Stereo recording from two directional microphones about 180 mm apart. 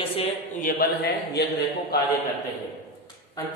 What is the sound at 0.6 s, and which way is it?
Speech, 55° left (ahead or behind).